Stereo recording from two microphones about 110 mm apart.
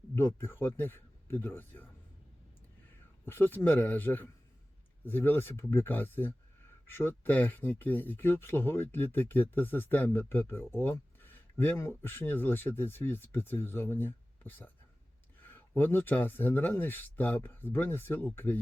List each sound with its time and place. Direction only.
0.2 s speech: 20° left (ahead or behind)
3.2 s speech: 20° left (ahead or behind)